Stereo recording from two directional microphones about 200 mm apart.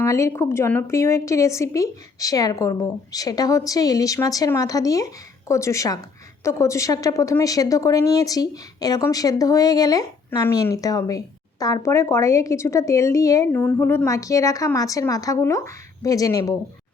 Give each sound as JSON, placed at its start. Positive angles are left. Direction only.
{"t": 0.0, "sound": "a woman's voice", "side_deg": 15}